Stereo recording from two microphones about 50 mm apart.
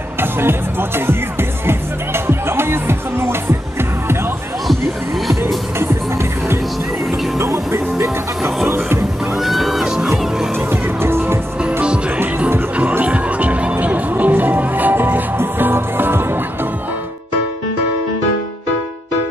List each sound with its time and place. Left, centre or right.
0.2 s speech: right
1.7 s music: right
7.1 s music: right
8.6 s music: right
9.4 s music: centre
10.7 s music: right
13.0 s music: right